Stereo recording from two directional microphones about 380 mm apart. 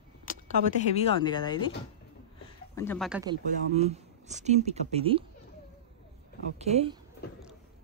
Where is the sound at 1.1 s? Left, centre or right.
Centre.